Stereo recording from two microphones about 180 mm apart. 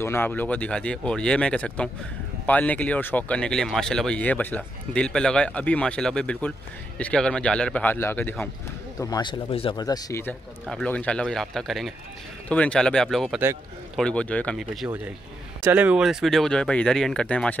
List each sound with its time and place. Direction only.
0.0 s speech: 10° left (ahead or behind)
9.0 s speech: 25° left (ahead or behind)
10.7 s speech: 5° left (ahead or behind)
15.6 s speech: 10° right (ahead or behind)